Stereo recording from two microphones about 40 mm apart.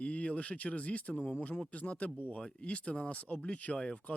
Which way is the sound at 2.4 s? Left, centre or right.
Left.